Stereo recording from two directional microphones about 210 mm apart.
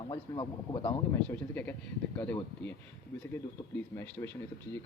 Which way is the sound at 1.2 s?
5° left (ahead or behind).